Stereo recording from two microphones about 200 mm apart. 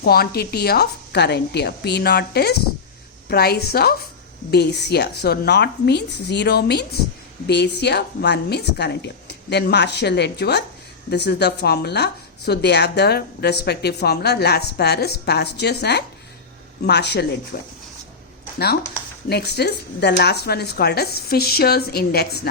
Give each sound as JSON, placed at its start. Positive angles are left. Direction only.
{"t": 0.0, "sound": "a woman's voice", "side_deg": 50}
{"t": 19.3, "sound": "a woman's voice", "side_deg": 55}